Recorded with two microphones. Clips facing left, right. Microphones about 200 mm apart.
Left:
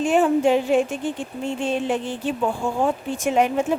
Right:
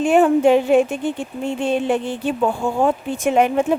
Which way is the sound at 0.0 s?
60° right (ahead or behind).